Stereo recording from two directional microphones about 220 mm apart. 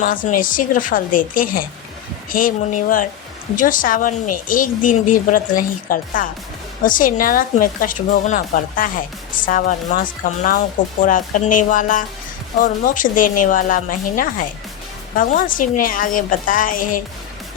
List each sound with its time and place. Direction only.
0.0 s speech: 35° left (ahead or behind)